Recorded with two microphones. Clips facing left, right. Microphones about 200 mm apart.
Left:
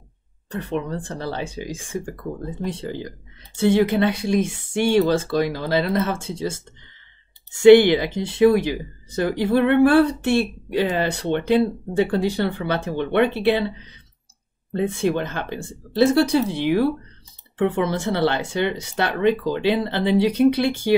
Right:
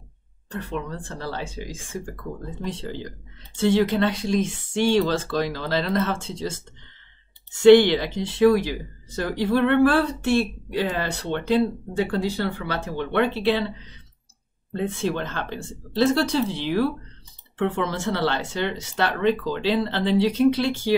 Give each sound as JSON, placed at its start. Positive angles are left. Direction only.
{"t": 0.5, "sound": "speech", "side_deg": 20}
{"t": 2.6, "sound": "speech", "side_deg": 10}
{"t": 7.6, "sound": "speech", "side_deg": 10}
{"t": 14.7, "sound": "speech", "side_deg": 15}